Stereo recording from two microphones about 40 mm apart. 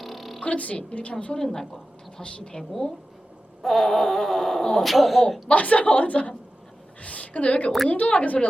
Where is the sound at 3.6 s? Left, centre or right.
Centre.